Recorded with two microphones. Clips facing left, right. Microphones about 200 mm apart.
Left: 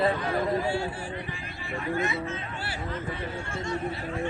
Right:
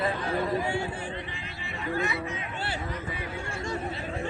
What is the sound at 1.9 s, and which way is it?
Speech, 20° left (ahead or behind).